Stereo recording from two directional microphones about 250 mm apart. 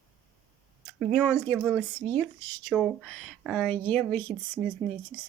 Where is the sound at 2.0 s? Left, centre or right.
Right.